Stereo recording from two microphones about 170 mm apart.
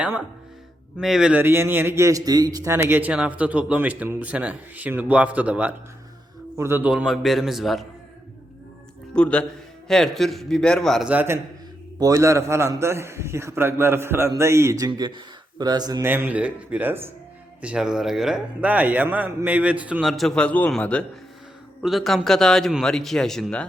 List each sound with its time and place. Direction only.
0.9 s a man's voice: 5° right (ahead or behind)
9.1 s a man's voice: 5° left (ahead or behind)
11.1 s a man's voice: 10° right (ahead or behind); by 23.6 s 5° left (ahead or behind)